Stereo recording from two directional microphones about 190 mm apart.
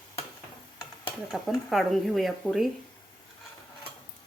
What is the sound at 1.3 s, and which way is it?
Speech, centre (ahead or behind).